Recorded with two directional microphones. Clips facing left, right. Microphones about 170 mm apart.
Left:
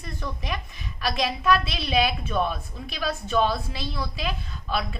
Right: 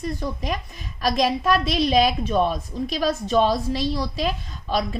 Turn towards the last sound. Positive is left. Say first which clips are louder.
# right 4 dB
turn(degrees=-40)  # may be behind; listen again after turning